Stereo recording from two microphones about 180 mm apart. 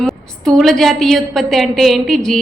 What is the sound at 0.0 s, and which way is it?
A woman's voice, centre (ahead or behind).